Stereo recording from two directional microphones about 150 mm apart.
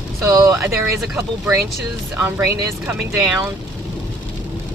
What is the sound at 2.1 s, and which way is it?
Speech, 15° right (ahead or behind).